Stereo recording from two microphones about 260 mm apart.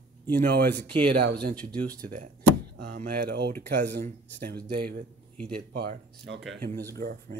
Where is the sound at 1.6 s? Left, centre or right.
Centre.